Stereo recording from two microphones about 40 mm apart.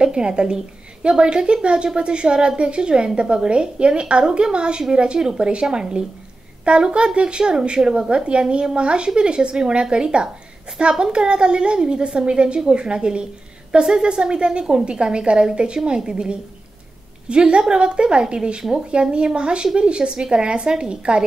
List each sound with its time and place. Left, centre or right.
0.0 s a woman's voice: right